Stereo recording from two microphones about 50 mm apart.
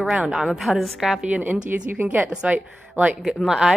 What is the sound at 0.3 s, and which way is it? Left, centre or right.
Speech, centre.